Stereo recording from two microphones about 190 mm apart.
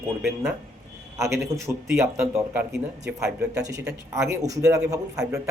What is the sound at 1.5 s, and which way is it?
Speech, 15° right (ahead or behind).